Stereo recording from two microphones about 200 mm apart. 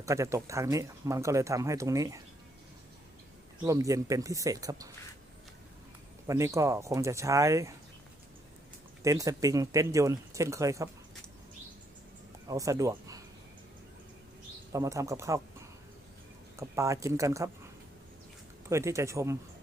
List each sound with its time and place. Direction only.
0.0 s speech: 15° right (ahead or behind)
3.6 s speech: 15° right (ahead or behind)
6.2 s speech: 15° right (ahead or behind)
9.0 s speech: 15° right (ahead or behind)
12.5 s speech: 15° right (ahead or behind)
14.7 s speech: 15° right (ahead or behind)
16.6 s speech: 15° right (ahead or behind)
18.7 s speech: 15° right (ahead or behind)